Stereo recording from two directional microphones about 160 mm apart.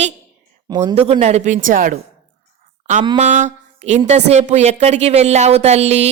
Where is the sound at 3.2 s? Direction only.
50° right (ahead or behind).